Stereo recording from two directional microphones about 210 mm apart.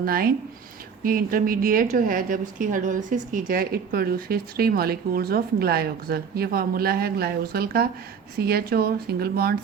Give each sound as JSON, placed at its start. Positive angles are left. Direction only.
{"t": 0.0, "sound": "a woman's voice", "side_deg": -45}